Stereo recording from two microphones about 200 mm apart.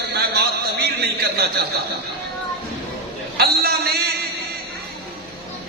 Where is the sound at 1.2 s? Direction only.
55° right (ahead or behind).